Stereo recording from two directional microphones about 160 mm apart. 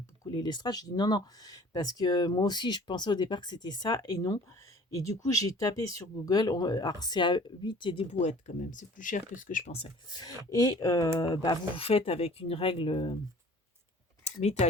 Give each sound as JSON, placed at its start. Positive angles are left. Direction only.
{"t": 0.3, "sound": "speech", "side_deg": 25}
{"t": 8.2, "sound": "speech", "side_deg": 50}
{"t": 9.7, "sound": "speech", "side_deg": 30}